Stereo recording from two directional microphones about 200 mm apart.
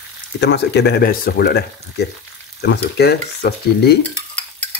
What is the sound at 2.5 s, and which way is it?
Frying, 55° left (ahead or behind).